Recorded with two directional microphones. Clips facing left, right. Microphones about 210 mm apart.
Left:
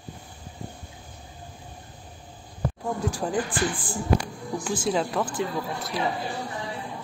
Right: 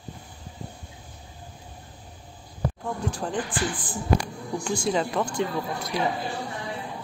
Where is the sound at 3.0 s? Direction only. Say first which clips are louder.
Left 2 dB; 10° left (ahead or behind).